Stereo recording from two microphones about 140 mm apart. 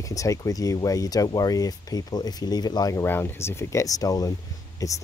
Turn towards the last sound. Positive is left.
turn(degrees=25)  # may be behind; listen again after turning